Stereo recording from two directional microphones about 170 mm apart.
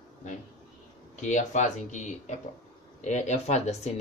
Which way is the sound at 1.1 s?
45° left (ahead or behind).